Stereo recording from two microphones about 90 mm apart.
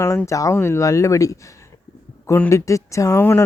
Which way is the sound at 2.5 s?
35° left (ahead or behind).